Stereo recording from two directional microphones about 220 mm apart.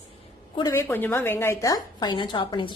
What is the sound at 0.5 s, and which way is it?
A woman's voice, 15° left (ahead or behind).